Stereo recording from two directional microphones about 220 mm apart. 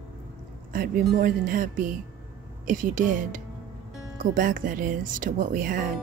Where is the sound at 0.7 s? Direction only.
40° right (ahead or behind).